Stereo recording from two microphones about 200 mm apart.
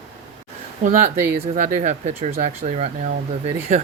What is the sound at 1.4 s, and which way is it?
Speech, 40° right (ahead or behind).